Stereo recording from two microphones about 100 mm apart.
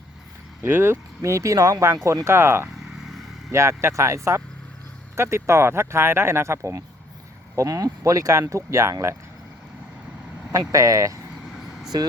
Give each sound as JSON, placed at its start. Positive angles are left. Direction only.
{"t": 0.6, "sound": "speech", "side_deg": -25}
{"t": 2.7, "sound": "vehicle", "side_deg": -5}
{"t": 3.5, "sound": "speech", "side_deg": -25}
{"t": 10.5, "sound": "speech", "side_deg": -35}
{"t": 11.5, "sound": "vehicle", "side_deg": -5}